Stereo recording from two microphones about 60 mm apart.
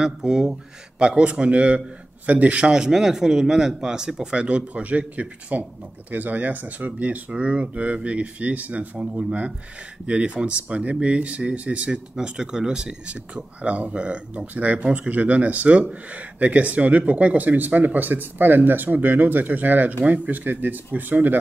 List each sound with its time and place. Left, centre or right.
0.0 s speech: centre
2.7 s speech: centre; by 21.4 s right